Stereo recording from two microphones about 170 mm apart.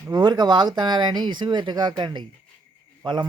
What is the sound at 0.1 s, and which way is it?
Speech, 25° right (ahead or behind).